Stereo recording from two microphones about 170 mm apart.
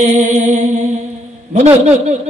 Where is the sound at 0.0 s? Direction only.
45° right (ahead or behind).